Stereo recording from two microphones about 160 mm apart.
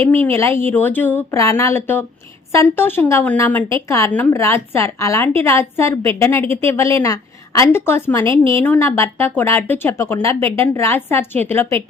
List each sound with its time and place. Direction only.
0.1 s a woman's voice: 15° left (ahead or behind)